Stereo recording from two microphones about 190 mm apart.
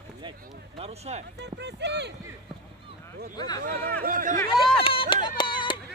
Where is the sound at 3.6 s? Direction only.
50° right (ahead or behind).